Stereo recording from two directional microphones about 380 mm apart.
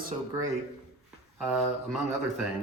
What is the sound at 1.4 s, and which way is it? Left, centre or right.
Speech, centre.